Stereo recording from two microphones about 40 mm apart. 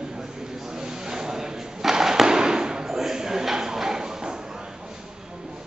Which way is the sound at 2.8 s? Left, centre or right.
Centre.